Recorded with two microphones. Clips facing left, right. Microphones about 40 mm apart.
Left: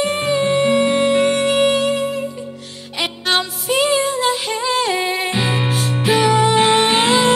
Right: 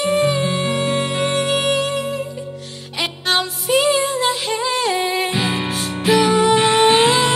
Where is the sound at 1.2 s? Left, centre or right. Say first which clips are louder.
Left 3 dB; centre.